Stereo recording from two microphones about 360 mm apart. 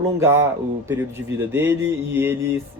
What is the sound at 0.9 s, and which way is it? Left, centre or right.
Speech, centre.